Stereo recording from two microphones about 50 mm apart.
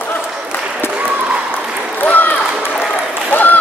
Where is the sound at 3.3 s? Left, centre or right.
Left.